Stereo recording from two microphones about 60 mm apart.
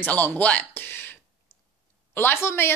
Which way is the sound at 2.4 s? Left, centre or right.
Left.